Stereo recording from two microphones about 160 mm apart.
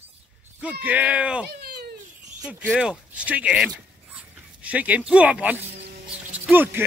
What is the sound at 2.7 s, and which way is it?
Speech, 5° right (ahead or behind).